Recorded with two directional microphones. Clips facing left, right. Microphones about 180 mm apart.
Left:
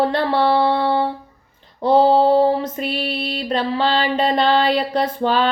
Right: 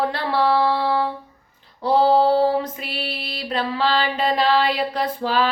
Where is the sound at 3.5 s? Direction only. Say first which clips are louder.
Left 2 dB; 30° left (ahead or behind).